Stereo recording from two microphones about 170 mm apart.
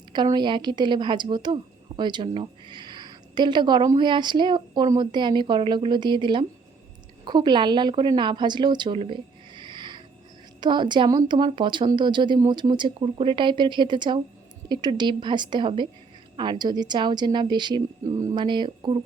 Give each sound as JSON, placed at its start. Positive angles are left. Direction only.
{"t": 0.1, "sound": "a woman's voice", "side_deg": -25}